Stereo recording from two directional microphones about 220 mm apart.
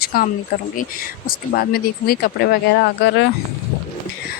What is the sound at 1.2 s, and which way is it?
Speech, 45° left (ahead or behind).